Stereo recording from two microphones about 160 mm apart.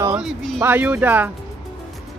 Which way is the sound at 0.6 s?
10° right (ahead or behind).